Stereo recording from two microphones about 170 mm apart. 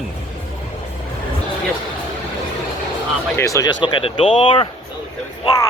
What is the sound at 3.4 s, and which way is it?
Speech, 20° left (ahead or behind).